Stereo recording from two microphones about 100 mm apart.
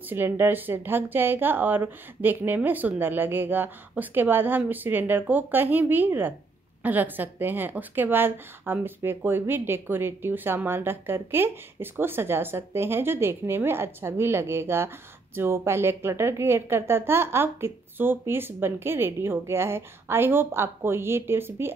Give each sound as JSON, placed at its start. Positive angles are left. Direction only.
{"t": 0.1, "sound": "speech", "side_deg": -20}